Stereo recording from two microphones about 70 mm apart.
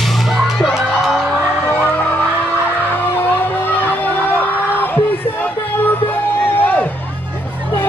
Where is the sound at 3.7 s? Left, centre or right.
Left.